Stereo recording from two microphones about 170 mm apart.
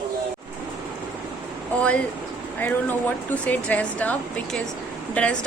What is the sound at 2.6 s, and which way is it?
A woman's voice, 10° left (ahead or behind).